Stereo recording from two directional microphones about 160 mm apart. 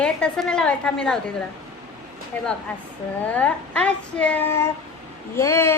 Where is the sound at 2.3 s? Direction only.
10° left (ahead or behind).